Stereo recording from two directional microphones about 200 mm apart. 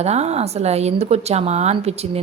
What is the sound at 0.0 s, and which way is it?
Speech, 35° right (ahead or behind).